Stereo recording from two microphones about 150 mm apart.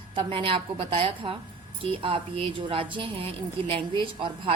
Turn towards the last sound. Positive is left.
turn(degrees=-35)  # may be behind; listen again after turning